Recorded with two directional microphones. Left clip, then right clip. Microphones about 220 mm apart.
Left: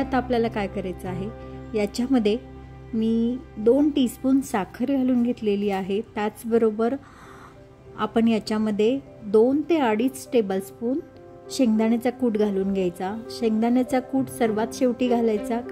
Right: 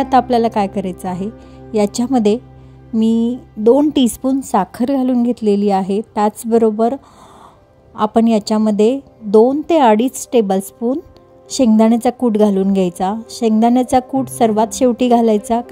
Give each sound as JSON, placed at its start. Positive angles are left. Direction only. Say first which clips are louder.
{"t": 0.0, "sound": "a woman's voice", "louder": "right 11 dB", "side_deg": -35}